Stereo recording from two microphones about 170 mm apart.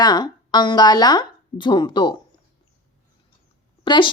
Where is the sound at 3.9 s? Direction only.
30° left (ahead or behind).